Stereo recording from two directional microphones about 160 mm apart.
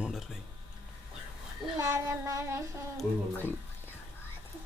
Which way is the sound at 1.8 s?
20° right (ahead or behind).